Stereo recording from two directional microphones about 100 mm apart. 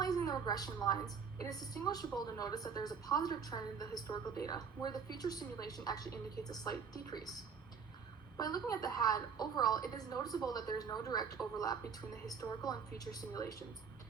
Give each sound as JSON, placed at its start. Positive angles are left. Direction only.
{"t": 0.3, "sound": "a woman's voice", "side_deg": 40}